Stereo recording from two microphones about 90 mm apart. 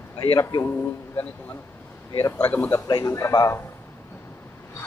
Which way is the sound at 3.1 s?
35° left (ahead or behind).